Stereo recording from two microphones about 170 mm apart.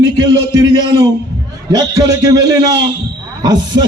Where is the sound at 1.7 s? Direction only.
20° right (ahead or behind).